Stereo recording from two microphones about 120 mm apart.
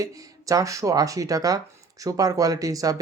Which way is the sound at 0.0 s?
30° right (ahead or behind).